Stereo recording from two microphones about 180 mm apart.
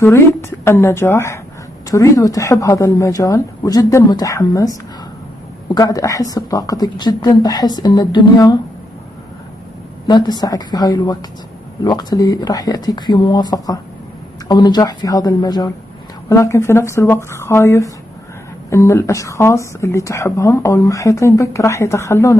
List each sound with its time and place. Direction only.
0.0 s a woman's voice: 15° left (ahead or behind)
5.8 s a woman's voice: 20° left (ahead or behind)
10.0 s a woman's voice: 25° left (ahead or behind)